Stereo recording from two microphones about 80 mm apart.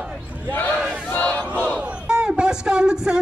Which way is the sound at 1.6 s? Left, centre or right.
Centre.